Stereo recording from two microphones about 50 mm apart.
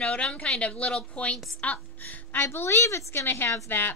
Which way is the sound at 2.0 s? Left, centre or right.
Left.